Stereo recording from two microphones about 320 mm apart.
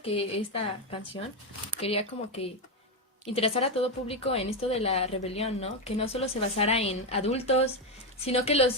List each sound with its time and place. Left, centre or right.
0.0 s a woman's voice: centre